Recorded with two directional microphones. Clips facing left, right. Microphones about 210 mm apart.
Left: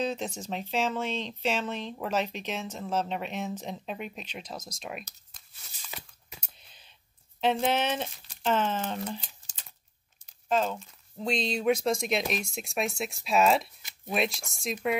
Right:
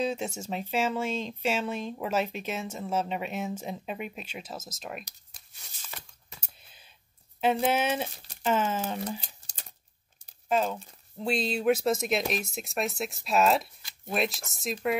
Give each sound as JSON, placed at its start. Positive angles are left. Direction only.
{"t": 0.0, "sound": "speech", "side_deg": -10}
{"t": 6.4, "sound": "a sound", "side_deg": -5}
{"t": 7.6, "sound": "speech", "side_deg": -5}
{"t": 9.2, "sound": "crumpling", "side_deg": -35}
{"t": 10.5, "sound": "speech", "side_deg": -5}